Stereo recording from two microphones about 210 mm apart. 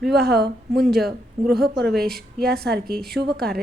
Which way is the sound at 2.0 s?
45° right (ahead or behind).